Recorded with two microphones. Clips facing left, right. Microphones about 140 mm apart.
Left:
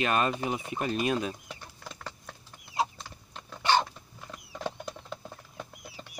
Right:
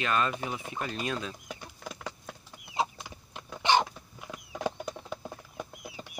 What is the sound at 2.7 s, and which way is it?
Chicken, 15° right (ahead or behind).